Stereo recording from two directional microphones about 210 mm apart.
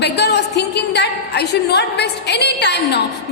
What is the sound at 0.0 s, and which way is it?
A woman's voice, 55° left (ahead or behind).